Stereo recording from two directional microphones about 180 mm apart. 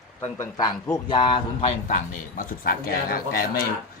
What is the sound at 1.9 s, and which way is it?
A man's voice, 50° left (ahead or behind).